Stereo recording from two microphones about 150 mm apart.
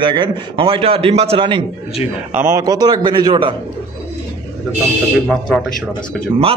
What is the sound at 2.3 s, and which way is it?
A man's voice, 20° right (ahead or behind).